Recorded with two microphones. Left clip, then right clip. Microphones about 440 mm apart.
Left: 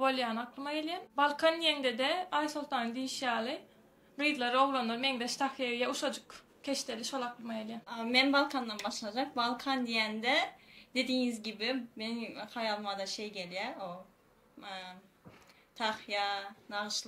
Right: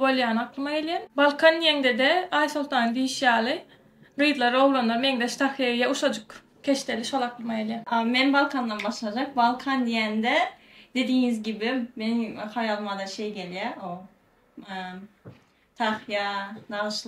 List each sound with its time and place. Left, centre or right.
0.0 s speech: centre
7.8 s speech: left